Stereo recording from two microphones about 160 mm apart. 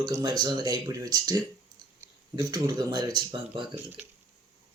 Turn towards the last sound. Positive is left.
turn(degrees=-25)  # may be behind; listen again after turning